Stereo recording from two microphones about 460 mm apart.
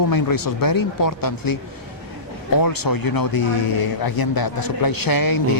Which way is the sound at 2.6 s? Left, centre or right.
Left.